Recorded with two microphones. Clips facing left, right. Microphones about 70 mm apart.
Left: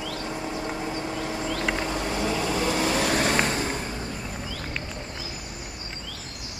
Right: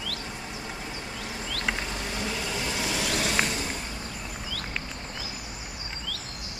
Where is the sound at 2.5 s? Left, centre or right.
Left.